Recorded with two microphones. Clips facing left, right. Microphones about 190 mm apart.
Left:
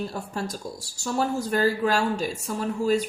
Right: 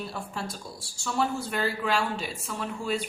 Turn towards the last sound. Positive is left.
turn(degrees=40)  # may be behind; listen again after turning